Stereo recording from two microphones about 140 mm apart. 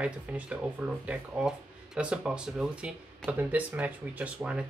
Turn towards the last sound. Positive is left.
turn(degrees=-10)  # may be behind; listen again after turning